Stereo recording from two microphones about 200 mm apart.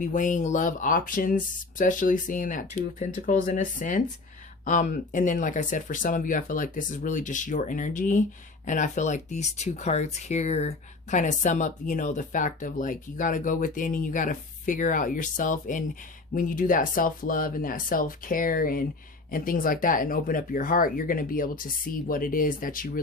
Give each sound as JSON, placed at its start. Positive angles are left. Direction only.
{"t": 0.0, "sound": "speech", "side_deg": 40}